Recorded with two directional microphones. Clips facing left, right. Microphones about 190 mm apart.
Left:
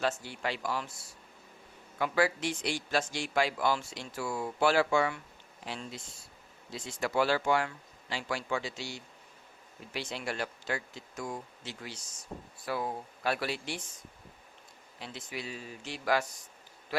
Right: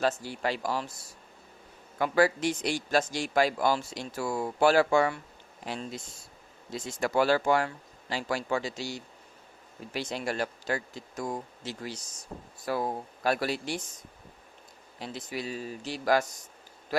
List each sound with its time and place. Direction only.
0.0 s a man's voice: 40° right (ahead or behind)
14.9 s a man's voice: 40° right (ahead or behind)
16.9 s a sound: 40° right (ahead or behind)